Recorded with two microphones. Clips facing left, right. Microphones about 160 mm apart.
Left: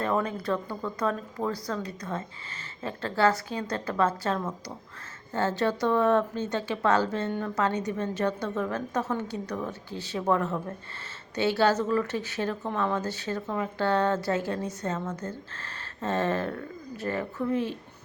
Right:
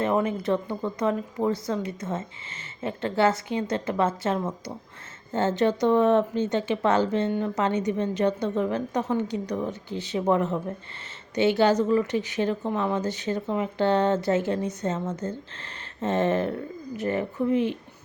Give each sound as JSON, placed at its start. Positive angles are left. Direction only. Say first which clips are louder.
{"t": 0.0, "sound": "speech", "louder": "right 4 dB", "side_deg": -20}